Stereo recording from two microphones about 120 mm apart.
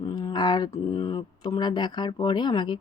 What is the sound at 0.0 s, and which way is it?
Speech, 35° left (ahead or behind).